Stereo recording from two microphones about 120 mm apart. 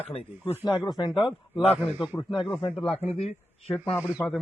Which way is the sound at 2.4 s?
40° left (ahead or behind).